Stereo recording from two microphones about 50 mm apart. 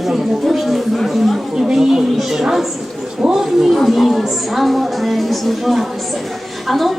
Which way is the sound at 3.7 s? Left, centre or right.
Centre.